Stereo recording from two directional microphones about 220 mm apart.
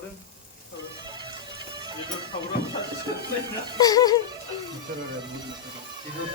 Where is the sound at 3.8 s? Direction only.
15° left (ahead or behind).